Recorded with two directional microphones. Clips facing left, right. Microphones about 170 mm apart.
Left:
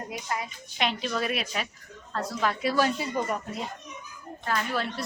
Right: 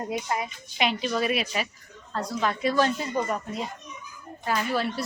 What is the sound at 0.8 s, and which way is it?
A woman's voice, centre (ahead or behind).